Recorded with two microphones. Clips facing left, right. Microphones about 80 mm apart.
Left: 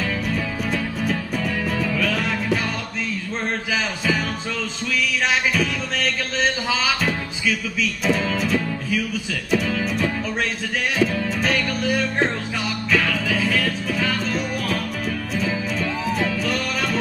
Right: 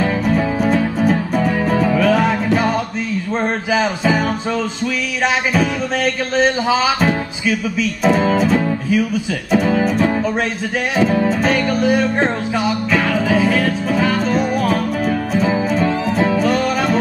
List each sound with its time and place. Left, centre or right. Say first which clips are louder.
0.0 s music: right 8 dB; right
3.7 s music: right 8 dB; right
6.3 s music: right 9 dB; right
9.5 s speech: right 7 dB; right
11.0 s music: right 8 dB; right